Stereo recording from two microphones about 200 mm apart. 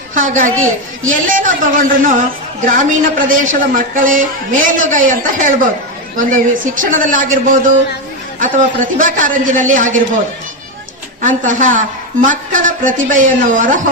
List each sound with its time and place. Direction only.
0.1 s a woman's voice: 40° right (ahead or behind)
11.2 s a woman's voice: 40° right (ahead or behind)